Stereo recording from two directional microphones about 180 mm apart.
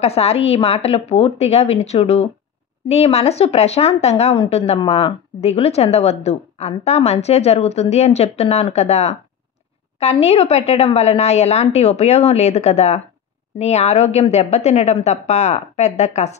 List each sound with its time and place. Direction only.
0.0 s a woman's voice: 35° left (ahead or behind)